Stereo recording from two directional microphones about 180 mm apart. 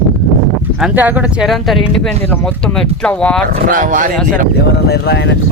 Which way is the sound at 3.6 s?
50° right (ahead or behind).